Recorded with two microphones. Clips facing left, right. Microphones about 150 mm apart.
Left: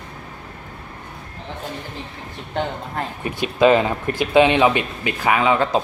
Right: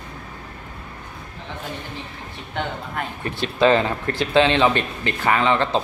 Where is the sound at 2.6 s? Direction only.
35° left (ahead or behind).